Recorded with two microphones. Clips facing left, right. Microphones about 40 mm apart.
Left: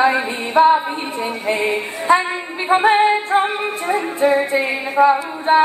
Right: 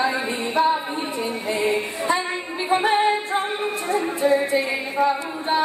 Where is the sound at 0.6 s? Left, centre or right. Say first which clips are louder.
Left 8 dB; centre.